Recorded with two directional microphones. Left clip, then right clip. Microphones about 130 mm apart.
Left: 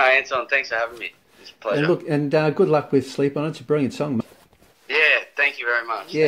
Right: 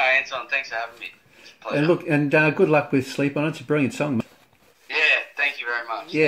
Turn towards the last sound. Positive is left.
turn(degrees=50)  # may be behind; listen again after turning